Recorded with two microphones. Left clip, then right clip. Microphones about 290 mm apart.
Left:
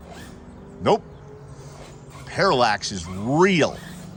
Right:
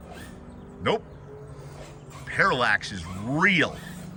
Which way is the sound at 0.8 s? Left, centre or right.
Centre.